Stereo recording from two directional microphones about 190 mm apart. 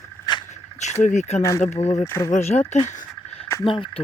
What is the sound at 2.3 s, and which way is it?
Speech, 35° left (ahead or behind).